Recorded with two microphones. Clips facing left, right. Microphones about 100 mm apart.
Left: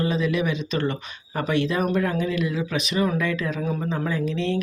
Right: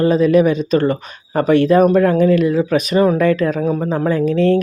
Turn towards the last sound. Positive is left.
turn(degrees=-50)  # may be behind; listen again after turning